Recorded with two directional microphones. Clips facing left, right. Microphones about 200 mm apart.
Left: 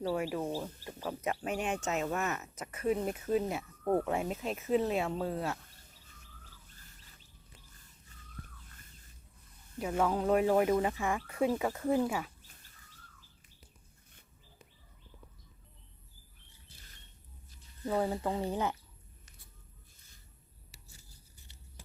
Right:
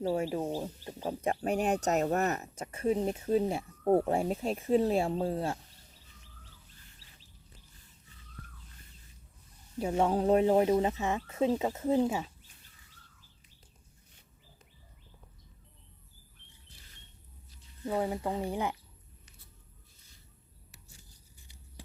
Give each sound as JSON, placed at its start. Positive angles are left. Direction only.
{"t": 0.1, "sound": "speech", "side_deg": -25}
{"t": 6.7, "sound": "chirp", "side_deg": 45}
{"t": 8.1, "sound": "fowl", "side_deg": 45}
{"t": 9.7, "sound": "speech", "side_deg": -30}
{"t": 17.8, "sound": "speech", "side_deg": -15}